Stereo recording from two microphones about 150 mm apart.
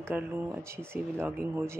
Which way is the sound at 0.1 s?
15° right (ahead or behind).